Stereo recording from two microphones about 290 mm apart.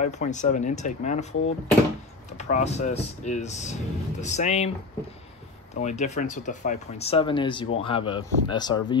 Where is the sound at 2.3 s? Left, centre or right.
Left.